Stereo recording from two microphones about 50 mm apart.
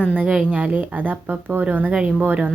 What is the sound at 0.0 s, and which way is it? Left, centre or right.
A woman's voice, right.